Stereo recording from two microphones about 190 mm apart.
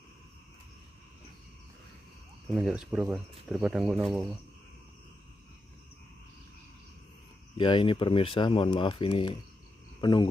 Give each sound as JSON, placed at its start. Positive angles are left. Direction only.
{"t": 2.5, "sound": "speech", "side_deg": -5}
{"t": 7.5, "sound": "speech", "side_deg": 25}
{"t": 9.9, "sound": "cricket", "side_deg": 25}